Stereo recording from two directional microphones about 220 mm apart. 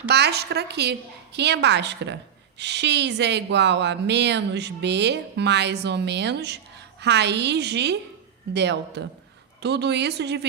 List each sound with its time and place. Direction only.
0.1 s speech: 50° right (ahead or behind)